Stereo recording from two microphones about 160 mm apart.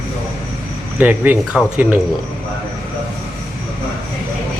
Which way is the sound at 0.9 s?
10° right (ahead or behind).